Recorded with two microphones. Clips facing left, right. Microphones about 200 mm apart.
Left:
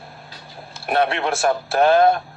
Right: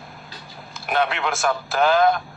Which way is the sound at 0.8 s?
35° left (ahead or behind).